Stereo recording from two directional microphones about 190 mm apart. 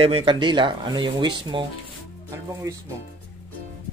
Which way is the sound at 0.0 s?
30° right (ahead or behind).